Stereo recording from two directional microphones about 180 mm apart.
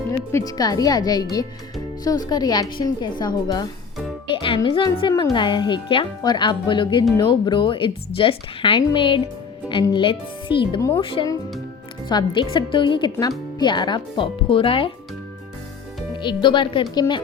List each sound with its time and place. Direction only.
0.3 s speech: 20° left (ahead or behind)
10.8 s speech: 15° left (ahead or behind)
11.0 s speech: 30° left (ahead or behind)
16.1 s speech: 25° left (ahead or behind)